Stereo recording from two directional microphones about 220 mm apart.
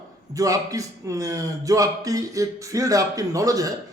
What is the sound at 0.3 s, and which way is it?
A man's voice, 15° right (ahead or behind).